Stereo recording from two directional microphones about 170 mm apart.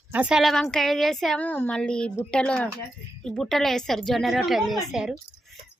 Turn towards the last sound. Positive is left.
turn(degrees=-5)  # may be behind; listen again after turning